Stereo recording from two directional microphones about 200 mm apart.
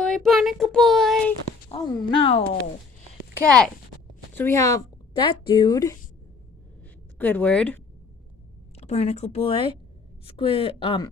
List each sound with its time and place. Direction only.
0.0 s child singing: centre (ahead or behind)
1.7 s speech: 25° left (ahead or behind)
3.4 s a child's voice: 5° left (ahead or behind)
7.2 s speech: 10° left (ahead or behind)
8.7 s a woman's voice: 30° left (ahead or behind)